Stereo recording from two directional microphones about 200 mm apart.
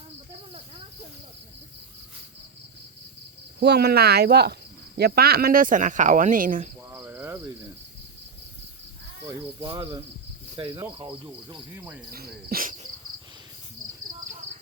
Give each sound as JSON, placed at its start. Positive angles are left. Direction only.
{"t": 3.6, "sound": "speech", "side_deg": -55}
{"t": 6.9, "sound": "cricket", "side_deg": -10}
{"t": 9.2, "sound": "speech", "side_deg": -15}
{"t": 10.8, "sound": "cricket", "side_deg": -25}
{"t": 12.1, "sound": "cricket", "side_deg": -50}